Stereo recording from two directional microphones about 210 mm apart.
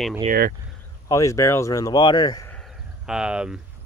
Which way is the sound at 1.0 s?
15° left (ahead or behind).